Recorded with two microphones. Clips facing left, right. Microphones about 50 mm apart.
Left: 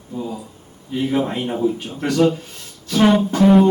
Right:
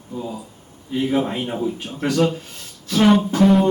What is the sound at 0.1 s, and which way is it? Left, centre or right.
Speech, centre.